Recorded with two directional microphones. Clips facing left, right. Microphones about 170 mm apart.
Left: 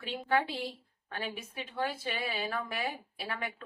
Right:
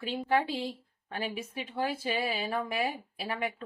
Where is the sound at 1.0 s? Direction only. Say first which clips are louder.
Right 4 dB; 25° right (ahead or behind).